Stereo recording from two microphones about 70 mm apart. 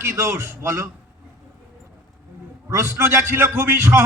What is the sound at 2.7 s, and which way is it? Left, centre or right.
A man's voice, right.